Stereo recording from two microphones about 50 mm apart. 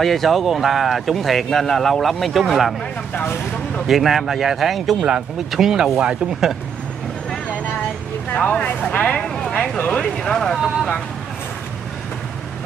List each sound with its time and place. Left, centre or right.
0.0 s speech: centre
3.8 s speech: centre
8.3 s speech: left
9.2 s a sound: centre
9.8 s speech: left
10.1 s speech: centre